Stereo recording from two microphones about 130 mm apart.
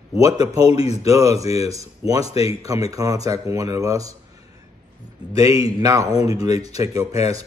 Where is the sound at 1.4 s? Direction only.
55° left (ahead or behind).